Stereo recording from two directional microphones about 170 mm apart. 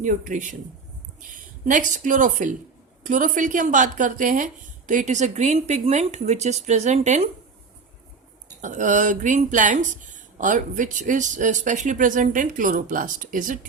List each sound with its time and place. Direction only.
0.0 s speech: 50° right (ahead or behind)
8.6 s speech: 45° right (ahead or behind)